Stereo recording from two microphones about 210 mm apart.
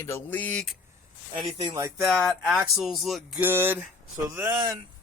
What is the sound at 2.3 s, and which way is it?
Speech, centre (ahead or behind).